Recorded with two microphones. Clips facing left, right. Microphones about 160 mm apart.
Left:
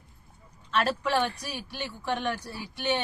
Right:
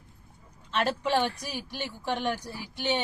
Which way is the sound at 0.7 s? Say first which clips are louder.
Even; 20° right (ahead or behind).